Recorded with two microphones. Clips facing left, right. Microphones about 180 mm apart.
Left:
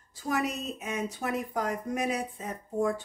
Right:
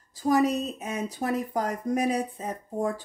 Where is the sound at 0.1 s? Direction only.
35° right (ahead or behind).